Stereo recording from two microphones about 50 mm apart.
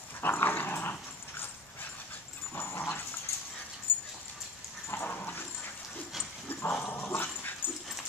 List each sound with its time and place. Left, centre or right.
0.2 s dog: left
2.5 s dog: left
6.6 s dog: left